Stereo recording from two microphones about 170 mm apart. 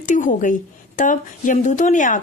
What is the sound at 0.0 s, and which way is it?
A woman's voice, 50° left (ahead or behind).